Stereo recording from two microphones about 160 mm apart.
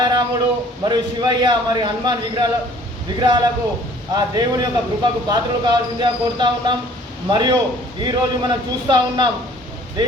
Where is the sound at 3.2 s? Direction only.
25° right (ahead or behind).